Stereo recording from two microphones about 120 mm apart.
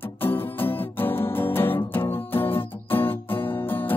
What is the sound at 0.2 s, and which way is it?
Music, 15° left (ahead or behind).